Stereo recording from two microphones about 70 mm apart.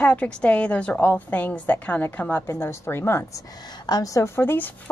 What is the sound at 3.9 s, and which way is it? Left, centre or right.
Speech, left.